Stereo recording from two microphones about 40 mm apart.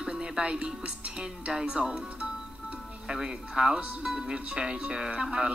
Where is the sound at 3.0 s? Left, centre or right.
Centre.